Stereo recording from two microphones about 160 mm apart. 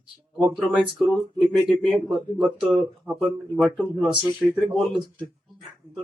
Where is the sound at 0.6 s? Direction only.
5° right (ahead or behind).